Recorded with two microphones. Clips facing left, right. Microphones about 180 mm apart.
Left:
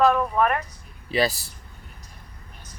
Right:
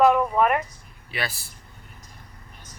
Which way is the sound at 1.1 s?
35° left (ahead or behind).